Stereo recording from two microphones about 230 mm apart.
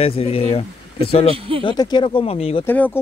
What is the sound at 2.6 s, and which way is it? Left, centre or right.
Speech, centre.